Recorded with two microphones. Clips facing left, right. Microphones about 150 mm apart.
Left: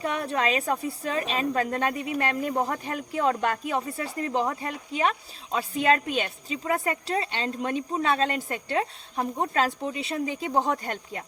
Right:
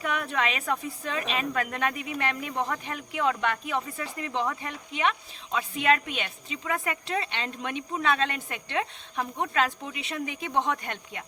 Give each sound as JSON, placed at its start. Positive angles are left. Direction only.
{"t": 0.0, "sound": "speech", "side_deg": 30}